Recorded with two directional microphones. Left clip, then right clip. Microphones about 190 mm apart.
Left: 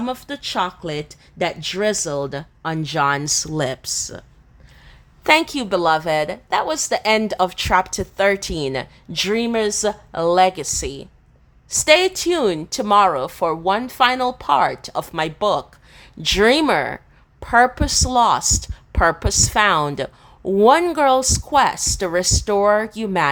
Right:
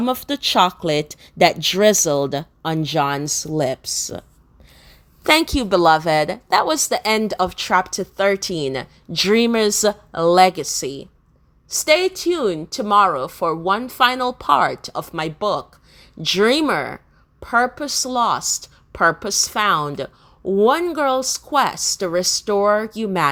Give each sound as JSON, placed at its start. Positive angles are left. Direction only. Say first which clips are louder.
{"t": 0.0, "sound": "a woman's voice", "louder": "right 5 dB", "side_deg": -20}
{"t": 5.2, "sound": "speech", "louder": "even", "side_deg": -15}
{"t": 9.3, "sound": "a woman's voice", "louder": "right 4 dB", "side_deg": -20}